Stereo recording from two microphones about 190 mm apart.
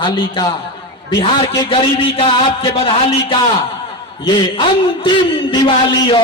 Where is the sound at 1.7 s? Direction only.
30° left (ahead or behind).